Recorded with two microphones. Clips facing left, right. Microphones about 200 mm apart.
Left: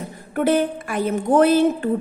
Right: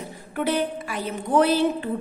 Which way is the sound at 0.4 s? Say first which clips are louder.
Left 5 dB; 50° left (ahead or behind).